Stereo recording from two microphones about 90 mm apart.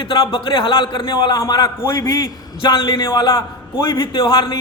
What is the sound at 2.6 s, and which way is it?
A man's voice, 65° left (ahead or behind).